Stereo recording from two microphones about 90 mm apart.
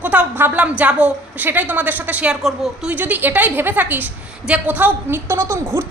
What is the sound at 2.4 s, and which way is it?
Speech, 5° right (ahead or behind).